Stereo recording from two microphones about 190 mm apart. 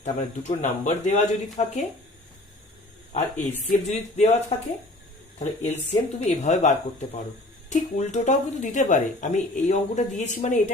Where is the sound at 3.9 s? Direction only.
35° left (ahead or behind).